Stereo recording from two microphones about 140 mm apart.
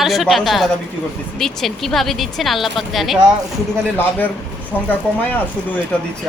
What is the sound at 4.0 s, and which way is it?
Speech, 10° left (ahead or behind).